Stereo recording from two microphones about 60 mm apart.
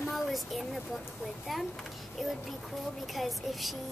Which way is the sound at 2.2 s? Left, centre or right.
Centre.